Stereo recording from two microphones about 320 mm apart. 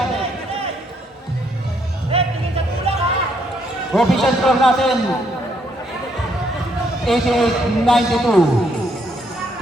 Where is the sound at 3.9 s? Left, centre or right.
Centre.